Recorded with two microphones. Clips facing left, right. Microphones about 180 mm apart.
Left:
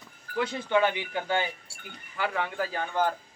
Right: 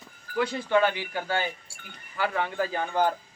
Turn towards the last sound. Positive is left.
turn(degrees=-10)  # may be behind; listen again after turning